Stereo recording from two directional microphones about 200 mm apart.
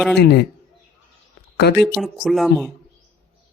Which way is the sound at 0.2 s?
55° left (ahead or behind).